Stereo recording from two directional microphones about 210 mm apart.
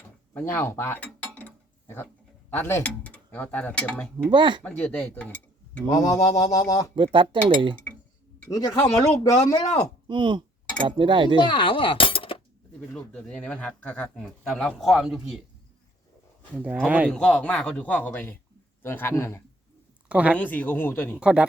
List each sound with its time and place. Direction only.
0.3 s cutlery: 10° left (ahead or behind)
2.5 s speech: 10° left (ahead or behind)
4.3 s speech: 20° right (ahead or behind)
4.6 s speech: 5° left (ahead or behind)
5.9 s speech: 15° left (ahead or behind)
6.9 s speech: 25° right (ahead or behind)
8.4 s speech: 15° left (ahead or behind)
10.1 s speech: 20° right (ahead or behind)
11.3 s speech: 25° left (ahead or behind)
12.9 s a man's voice: 5° left (ahead or behind)
16.6 s speech: 5° right (ahead or behind); by 19.4 s 10° left (ahead or behind)
20.1 s speech: 5° right (ahead or behind)
20.4 s speech: 10° left (ahead or behind)
21.2 s a man's voice: 5° right (ahead or behind)